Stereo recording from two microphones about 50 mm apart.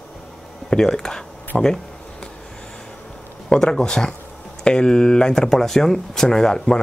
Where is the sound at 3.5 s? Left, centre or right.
Centre.